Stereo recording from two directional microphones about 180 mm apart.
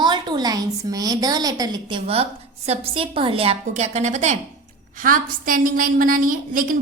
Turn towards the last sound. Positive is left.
turn(degrees=-50)  # may be behind; listen again after turning